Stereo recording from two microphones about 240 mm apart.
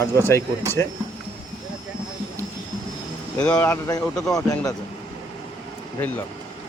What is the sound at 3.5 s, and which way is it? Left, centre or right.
Speech, centre.